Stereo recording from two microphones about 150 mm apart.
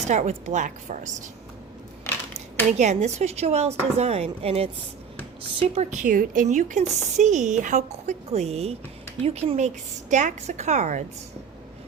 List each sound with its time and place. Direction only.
0.0 s speech: 50° right (ahead or behind)
2.1 s dishes: 15° left (ahead or behind)
2.7 s speech: 50° right (ahead or behind)